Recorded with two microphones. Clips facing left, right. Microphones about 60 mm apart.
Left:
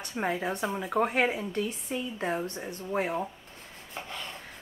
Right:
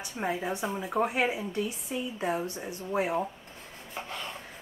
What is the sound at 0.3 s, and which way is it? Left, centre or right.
Speech, centre.